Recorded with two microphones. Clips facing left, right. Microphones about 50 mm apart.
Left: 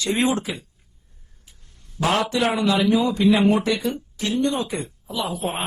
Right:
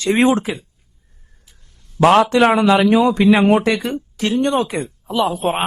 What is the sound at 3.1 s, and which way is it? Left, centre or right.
Speech, right.